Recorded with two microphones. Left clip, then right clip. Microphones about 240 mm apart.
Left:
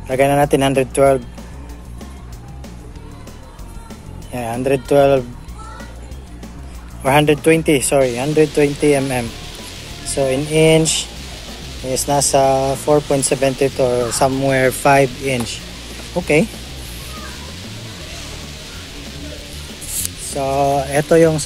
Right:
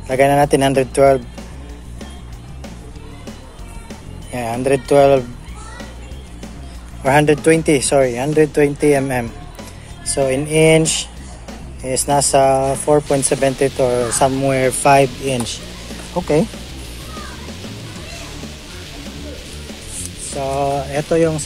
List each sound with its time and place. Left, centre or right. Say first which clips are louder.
0.1 s speech: right 1 dB; centre
4.3 s speech: right 1 dB; centre
7.0 s speech: even; centre
20.3 s speech: left 3 dB; centre